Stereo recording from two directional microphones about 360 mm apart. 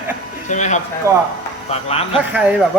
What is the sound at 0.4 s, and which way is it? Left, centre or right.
Speech, centre.